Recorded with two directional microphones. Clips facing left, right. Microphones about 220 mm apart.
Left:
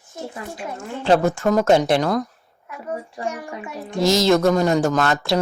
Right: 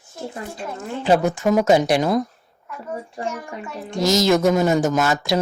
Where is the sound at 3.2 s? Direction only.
15° left (ahead or behind).